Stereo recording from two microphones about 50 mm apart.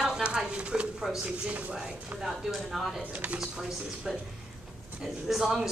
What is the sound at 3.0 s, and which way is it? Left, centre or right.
Speech, right.